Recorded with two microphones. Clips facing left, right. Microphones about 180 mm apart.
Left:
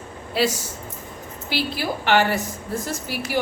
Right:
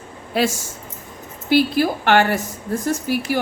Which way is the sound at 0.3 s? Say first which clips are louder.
Right 2 dB; 50° right (ahead or behind).